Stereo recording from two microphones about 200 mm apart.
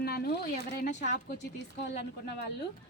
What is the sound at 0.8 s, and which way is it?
Speech, 35° left (ahead or behind).